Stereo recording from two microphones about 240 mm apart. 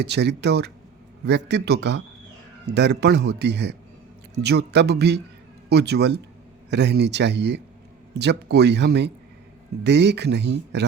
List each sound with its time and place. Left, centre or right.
0.0 s speech: right